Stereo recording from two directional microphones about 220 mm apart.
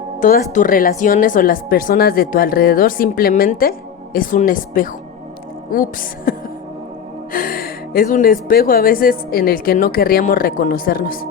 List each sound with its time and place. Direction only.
0.2 s speech: 35° left (ahead or behind)
7.3 s speech: 40° left (ahead or behind)